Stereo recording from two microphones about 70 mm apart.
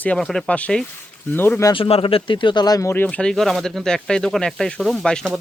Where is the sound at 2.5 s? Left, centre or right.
Left.